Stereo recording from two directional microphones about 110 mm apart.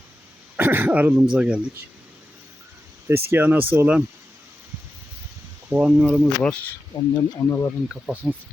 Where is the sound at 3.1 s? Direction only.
20° right (ahead or behind).